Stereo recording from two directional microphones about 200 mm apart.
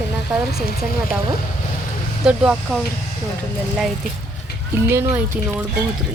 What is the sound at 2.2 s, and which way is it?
Speech, 5° right (ahead or behind).